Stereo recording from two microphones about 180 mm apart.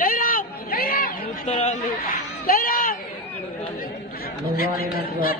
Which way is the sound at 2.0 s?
55° left (ahead or behind).